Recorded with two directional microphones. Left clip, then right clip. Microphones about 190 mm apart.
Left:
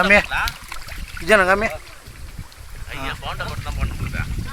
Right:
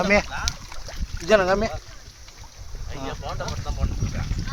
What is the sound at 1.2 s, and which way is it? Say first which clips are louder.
Speech: left 4 dB; 15° left (ahead or behind).